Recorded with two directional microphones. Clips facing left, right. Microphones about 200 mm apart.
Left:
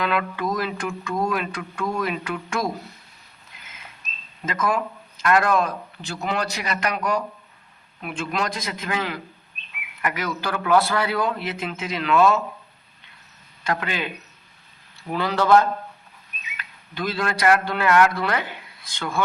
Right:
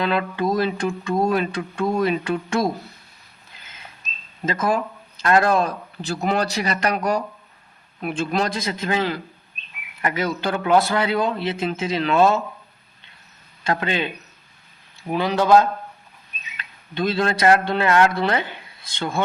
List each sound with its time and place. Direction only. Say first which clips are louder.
0.0 s mantra: right 3 dB; 30° right (ahead or behind)
4.4 s speech: right 2 dB; 30° right (ahead or behind)
10.0 s mantra: right 4 dB; 25° right (ahead or behind)
13.7 s mantra: right 3 dB; 25° right (ahead or behind)
15.0 s a man's voice: right 2 dB; 20° right (ahead or behind)
18.9 s mantra: right 2 dB; 25° right (ahead or behind)